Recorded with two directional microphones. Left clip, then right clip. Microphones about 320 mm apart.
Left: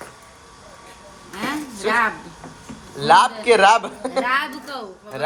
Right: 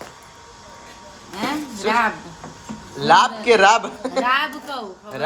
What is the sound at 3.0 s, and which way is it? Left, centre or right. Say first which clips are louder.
A man's voice: even; centre.